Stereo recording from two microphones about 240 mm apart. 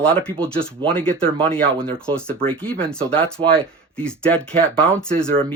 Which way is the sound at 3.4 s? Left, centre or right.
Right.